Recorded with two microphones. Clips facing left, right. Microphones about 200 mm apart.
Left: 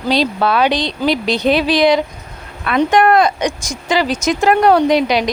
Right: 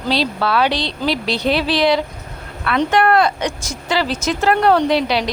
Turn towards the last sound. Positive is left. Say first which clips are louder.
# left 3 dB
turn(degrees=15)  # may be behind; listen again after turning